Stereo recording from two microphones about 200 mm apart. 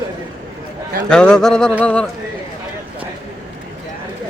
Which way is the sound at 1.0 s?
5° left (ahead or behind).